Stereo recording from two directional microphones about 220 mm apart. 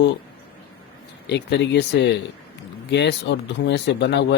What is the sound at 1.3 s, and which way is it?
Speech, 50° left (ahead or behind).